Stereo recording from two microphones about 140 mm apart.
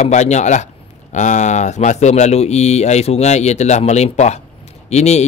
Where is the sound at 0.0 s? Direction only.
55° left (ahead or behind).